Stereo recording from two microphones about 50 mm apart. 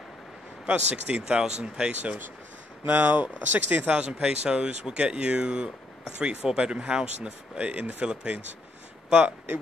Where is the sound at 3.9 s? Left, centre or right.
Centre.